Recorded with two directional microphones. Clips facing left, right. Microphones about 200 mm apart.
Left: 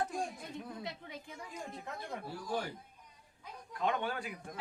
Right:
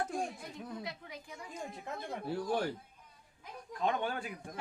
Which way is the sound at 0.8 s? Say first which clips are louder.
Even; 25° left (ahead or behind).